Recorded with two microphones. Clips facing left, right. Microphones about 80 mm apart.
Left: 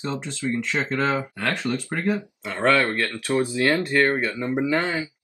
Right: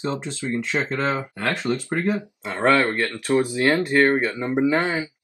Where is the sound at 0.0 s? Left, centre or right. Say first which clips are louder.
Right 1 dB; right.